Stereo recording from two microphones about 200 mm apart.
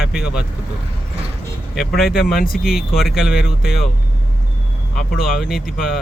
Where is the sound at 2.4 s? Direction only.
45° left (ahead or behind).